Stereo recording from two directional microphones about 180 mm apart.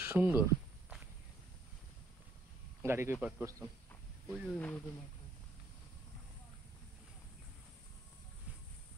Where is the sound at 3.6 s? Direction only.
15° left (ahead or behind).